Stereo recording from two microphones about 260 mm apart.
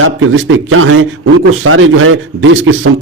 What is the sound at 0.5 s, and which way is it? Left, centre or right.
A man's voice, right.